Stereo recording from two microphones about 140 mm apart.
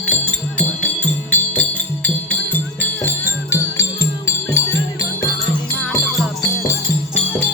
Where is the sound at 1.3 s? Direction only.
10° left (ahead or behind).